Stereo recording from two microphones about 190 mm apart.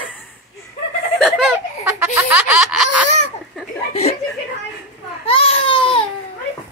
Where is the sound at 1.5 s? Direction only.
10° right (ahead or behind).